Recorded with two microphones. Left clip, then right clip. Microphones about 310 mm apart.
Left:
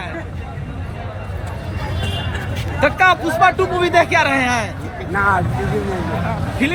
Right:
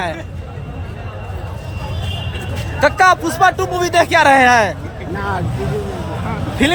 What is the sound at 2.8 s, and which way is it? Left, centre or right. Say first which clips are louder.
A man's voice: right 2 dB; centre.